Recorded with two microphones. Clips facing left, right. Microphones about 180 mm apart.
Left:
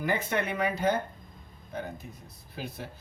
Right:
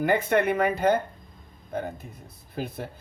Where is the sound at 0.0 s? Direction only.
55° right (ahead or behind).